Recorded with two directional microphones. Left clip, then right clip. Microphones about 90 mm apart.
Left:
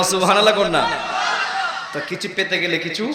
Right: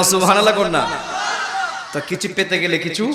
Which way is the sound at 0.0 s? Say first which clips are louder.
Right 1 dB; 45° right (ahead or behind).